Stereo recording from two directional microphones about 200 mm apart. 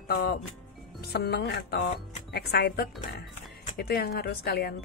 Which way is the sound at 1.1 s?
55° left (ahead or behind).